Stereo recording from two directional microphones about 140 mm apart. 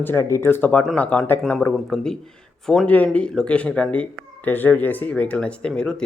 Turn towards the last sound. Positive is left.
turn(degrees=5)  # may be behind; listen again after turning